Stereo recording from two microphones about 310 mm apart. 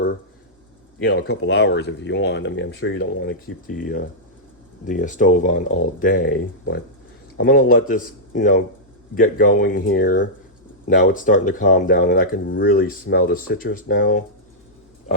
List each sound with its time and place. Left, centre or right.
1.0 s speech: left